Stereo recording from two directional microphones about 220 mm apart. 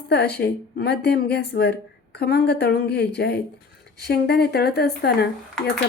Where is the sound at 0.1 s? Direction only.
50° left (ahead or behind).